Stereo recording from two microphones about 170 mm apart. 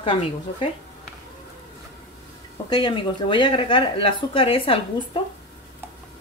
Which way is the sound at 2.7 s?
25° left (ahead or behind).